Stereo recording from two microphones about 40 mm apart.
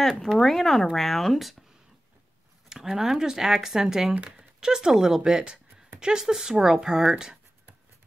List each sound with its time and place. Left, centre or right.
0.4 s speech: centre
2.7 s speech: centre